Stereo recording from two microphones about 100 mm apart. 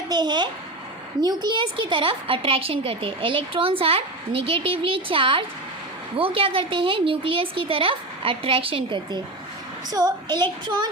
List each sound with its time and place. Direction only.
0.1 s a child's voice: 45° right (ahead or behind)
10.0 s a child's voice: 35° right (ahead or behind)